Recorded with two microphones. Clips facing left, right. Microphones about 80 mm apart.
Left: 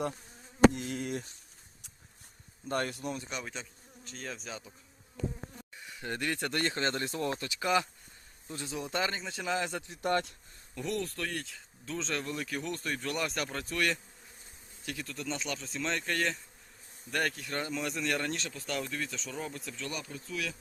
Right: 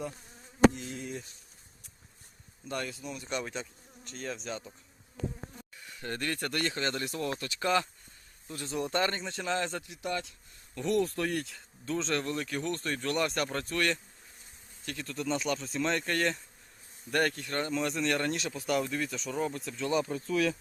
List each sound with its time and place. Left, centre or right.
0.7 s speech: left
2.6 s speech: left
2.9 s speech: left
3.2 s speech: centre
5.9 s speech: centre
6.6 s speech: left
8.6 s speech: centre
9.8 s speech: left
10.8 s speech: centre
11.0 s speech: centre
11.3 s speech: centre
18.4 s speech: centre
20.1 s speech: right